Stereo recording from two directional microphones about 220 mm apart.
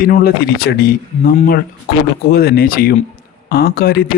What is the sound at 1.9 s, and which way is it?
Speech, 50° left (ahead or behind).